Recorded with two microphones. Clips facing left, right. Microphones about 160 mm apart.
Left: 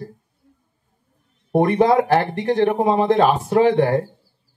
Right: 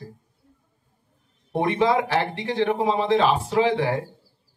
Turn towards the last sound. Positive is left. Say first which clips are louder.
# left 6 dB
turn(degrees=55)  # may be behind; listen again after turning